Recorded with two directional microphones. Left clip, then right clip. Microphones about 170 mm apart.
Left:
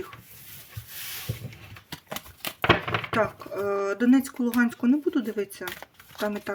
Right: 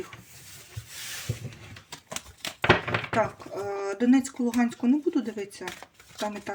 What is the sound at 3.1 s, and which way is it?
Speech, 30° left (ahead or behind).